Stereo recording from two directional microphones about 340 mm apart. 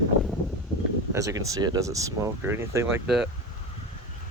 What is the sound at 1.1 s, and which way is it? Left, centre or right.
Speech, centre.